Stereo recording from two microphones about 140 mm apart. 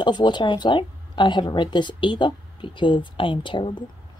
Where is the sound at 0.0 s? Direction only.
30° left (ahead or behind).